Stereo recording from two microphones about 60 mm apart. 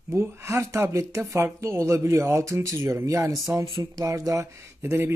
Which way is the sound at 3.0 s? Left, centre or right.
Right.